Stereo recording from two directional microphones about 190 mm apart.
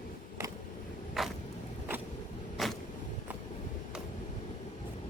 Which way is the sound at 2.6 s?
Centre (ahead or behind).